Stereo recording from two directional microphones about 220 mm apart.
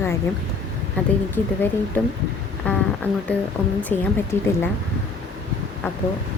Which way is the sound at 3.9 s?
5° left (ahead or behind).